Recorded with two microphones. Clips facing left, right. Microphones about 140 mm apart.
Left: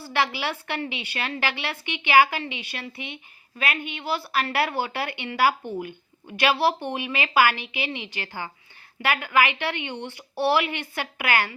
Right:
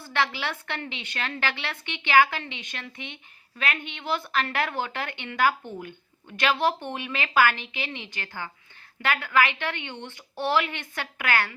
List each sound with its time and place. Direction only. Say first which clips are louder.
0.1 s a woman's voice: left 2 dB; 10° left (ahead or behind)